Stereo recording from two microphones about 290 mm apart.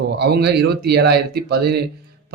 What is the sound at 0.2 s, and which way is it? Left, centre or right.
Speech, right.